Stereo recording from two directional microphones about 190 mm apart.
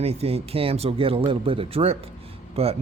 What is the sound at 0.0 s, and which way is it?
Speech, 30° right (ahead or behind).